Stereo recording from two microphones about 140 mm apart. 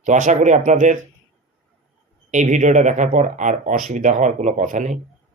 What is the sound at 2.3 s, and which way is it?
Speech, 60° right (ahead or behind).